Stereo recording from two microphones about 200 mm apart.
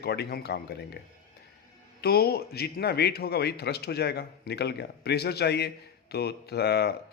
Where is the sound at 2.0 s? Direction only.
55° left (ahead or behind).